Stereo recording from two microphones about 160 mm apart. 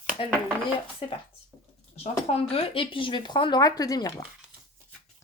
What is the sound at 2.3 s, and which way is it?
Speech, 35° left (ahead or behind).